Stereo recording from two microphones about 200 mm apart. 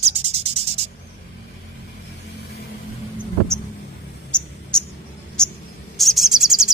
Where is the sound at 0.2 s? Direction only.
30° right (ahead or behind).